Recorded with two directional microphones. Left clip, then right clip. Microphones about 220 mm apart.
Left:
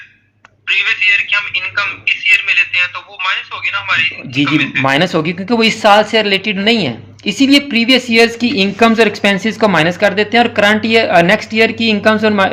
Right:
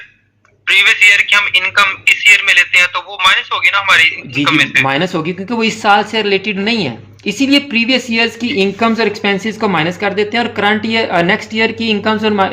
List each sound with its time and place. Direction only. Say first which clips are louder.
0.7 s a man's voice: right 4 dB; 25° right (ahead or behind)
4.8 s speech: left 1 dB; 15° left (ahead or behind)